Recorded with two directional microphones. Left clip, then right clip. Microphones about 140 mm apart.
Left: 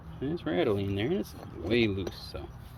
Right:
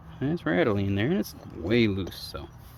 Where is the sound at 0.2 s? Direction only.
80° right.